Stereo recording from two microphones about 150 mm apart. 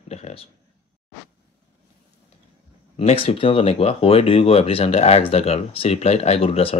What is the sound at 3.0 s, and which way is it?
Speech, 40° left (ahead or behind).